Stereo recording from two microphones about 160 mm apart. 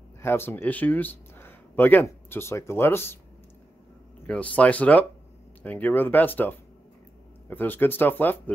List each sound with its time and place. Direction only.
0.2 s speech: 15° left (ahead or behind)
4.3 s speech: 10° left (ahead or behind)